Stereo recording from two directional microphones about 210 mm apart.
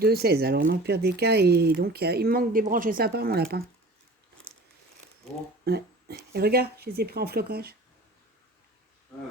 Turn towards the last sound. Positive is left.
turn(degrees=-50)  # may be behind; listen again after turning